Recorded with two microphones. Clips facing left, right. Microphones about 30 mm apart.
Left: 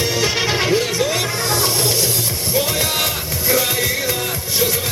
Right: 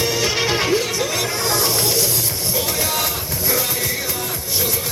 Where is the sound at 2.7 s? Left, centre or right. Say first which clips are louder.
Left 2 dB; left.